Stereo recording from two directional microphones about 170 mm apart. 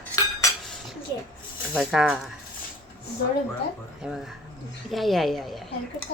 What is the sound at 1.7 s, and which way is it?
Speech, 5° right (ahead or behind).